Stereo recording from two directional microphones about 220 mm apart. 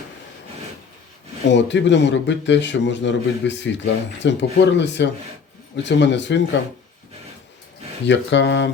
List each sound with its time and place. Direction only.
1.5 s a man's voice: 55° left (ahead or behind)
8.0 s a man's voice: 55° left (ahead or behind)